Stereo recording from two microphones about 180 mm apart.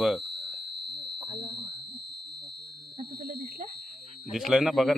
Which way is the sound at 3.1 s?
55° right (ahead or behind).